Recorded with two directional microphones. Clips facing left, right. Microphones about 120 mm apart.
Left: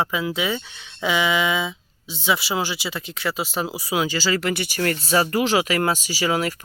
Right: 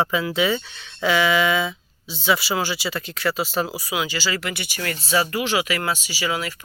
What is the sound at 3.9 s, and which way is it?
Speech, 40° left (ahead or behind).